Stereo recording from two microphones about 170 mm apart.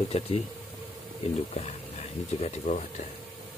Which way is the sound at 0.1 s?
40° left (ahead or behind).